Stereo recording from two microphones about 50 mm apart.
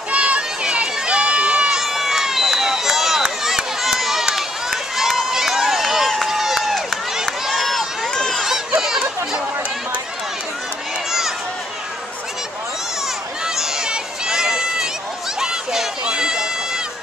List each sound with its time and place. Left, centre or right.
0.1 s run: right; by 8.1 s centre
8.1 s a sound: centre
8.5 s chatter: centre
11.1 s run: centre
13.6 s a sound: centre
15.4 s run: centre